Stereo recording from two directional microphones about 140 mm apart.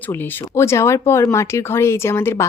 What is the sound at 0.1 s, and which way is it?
Speech, 20° left (ahead or behind).